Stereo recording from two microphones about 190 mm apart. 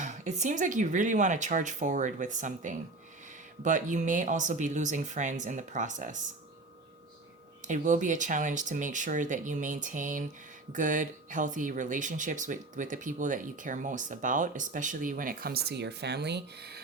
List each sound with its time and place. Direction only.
0.0 s speech: 40° right (ahead or behind)
7.6 s speech: 40° right (ahead or behind); by 16.8 s 55° right (ahead or behind)